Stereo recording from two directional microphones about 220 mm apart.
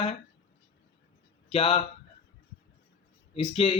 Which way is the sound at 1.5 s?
25° left (ahead or behind).